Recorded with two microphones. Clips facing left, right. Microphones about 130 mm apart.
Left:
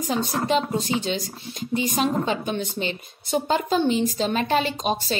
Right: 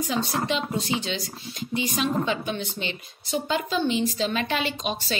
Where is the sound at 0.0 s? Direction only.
40° left (ahead or behind).